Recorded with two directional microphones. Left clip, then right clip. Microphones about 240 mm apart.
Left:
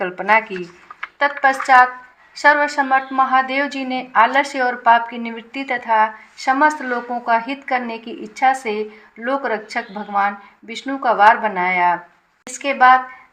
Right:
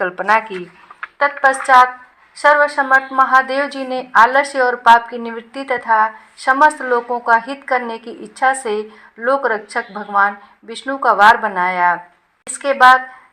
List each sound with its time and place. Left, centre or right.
0.0 s a woman's voice: centre